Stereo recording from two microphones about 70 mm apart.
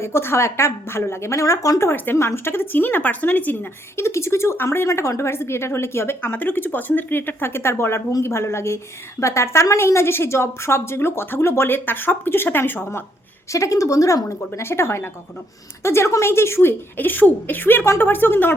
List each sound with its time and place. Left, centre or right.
0.0 s a woman's voice: left
1.9 s a woman's voice: left
4.0 s a woman's voice: left
4.9 s a woman's voice: left
13.5 s a woman's voice: left